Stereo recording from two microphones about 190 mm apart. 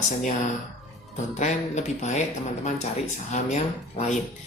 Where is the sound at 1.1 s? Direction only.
40° left (ahead or behind).